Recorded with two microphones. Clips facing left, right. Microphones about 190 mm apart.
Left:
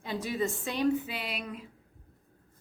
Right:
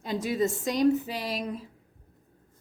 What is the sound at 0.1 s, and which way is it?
Speech, 40° right (ahead or behind).